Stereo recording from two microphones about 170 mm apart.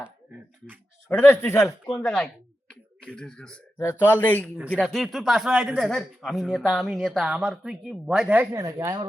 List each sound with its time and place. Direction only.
1.1 s speech: 15° left (ahead or behind)
2.0 s speech: 5° left (ahead or behind)
4.5 s speech: 10° right (ahead or behind)
8.6 s speech: 20° right (ahead or behind)